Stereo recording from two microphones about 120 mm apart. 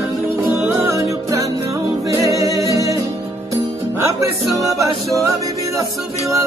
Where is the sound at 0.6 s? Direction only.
20° right (ahead or behind).